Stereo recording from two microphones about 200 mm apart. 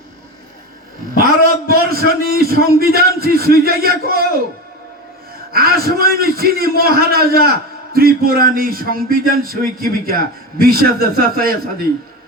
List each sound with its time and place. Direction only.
1.1 s a man's voice: 45° right (ahead or behind)
5.5 s speech: 50° right (ahead or behind)